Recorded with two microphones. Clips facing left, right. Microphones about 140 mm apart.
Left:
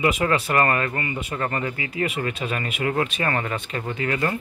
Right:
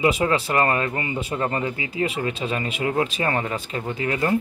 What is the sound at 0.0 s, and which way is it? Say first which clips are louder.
Speech: right 1 dB; 25° right (ahead or behind).